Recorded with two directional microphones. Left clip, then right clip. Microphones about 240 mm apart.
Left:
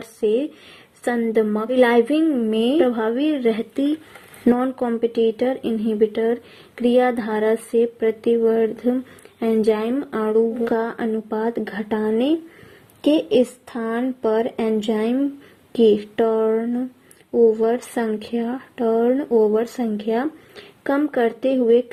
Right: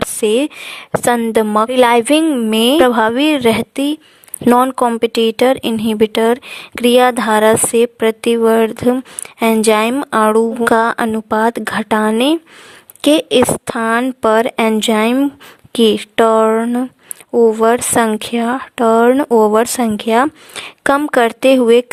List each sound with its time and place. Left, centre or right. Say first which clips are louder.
1.0 s speech: right 6 dB; right